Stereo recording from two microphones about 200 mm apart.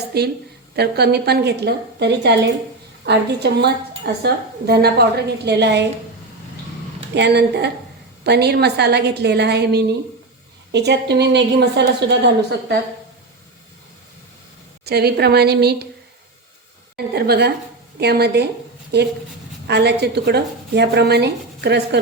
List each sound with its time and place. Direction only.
0.1 s a woman's voice: 55° right (ahead or behind)
7.1 s a woman's voice: 55° right (ahead or behind)
14.8 s a woman's voice: 50° right (ahead or behind)
17.2 s a woman's voice: 55° right (ahead or behind)
19.6 s a woman's voice: 55° right (ahead or behind)